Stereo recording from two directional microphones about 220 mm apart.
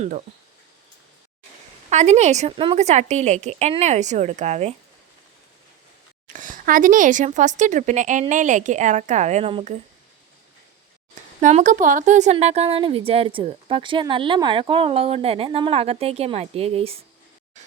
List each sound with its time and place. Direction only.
1.9 s speech: 30° right (ahead or behind)
6.2 s speech: 35° right (ahead or behind)
11.3 s a woman's voice: 35° right (ahead or behind)